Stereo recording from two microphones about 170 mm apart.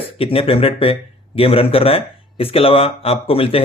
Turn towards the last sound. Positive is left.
turn(degrees=35)  # may be behind; listen again after turning